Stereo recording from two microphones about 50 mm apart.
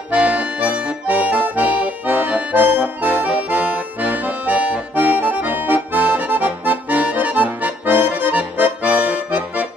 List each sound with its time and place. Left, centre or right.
0.1 s accordion: right
4.9 s accordion: right